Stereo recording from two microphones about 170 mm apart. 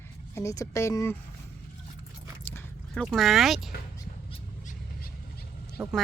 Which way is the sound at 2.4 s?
10° left (ahead or behind).